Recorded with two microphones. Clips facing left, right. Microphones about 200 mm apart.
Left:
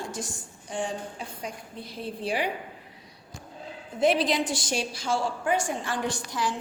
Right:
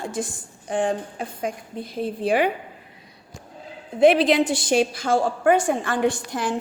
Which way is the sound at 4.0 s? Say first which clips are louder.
Right 8 dB; 65° right (ahead or behind).